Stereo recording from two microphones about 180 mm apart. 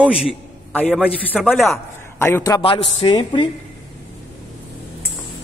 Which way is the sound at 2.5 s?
30° left (ahead or behind).